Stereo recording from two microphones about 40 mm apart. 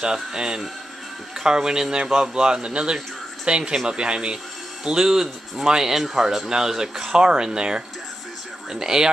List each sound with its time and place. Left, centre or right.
0.0 s a man's voice: centre